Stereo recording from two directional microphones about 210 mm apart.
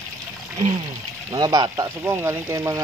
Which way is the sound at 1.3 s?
20° right (ahead or behind).